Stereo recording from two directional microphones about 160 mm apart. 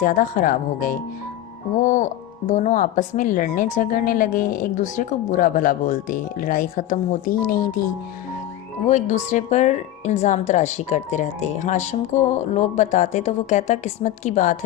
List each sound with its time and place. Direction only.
0.0 s a woman's voice: 55° left (ahead or behind)
8.9 s a woman's voice: 45° left (ahead or behind)